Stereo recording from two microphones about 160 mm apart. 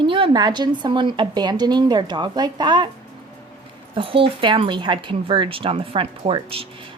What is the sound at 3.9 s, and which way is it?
Speech, 35° right (ahead or behind).